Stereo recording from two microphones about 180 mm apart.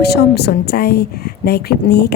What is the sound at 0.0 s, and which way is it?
Speech, 65° left (ahead or behind).